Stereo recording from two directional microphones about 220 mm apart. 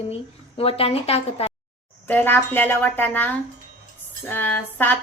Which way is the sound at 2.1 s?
10° left (ahead or behind).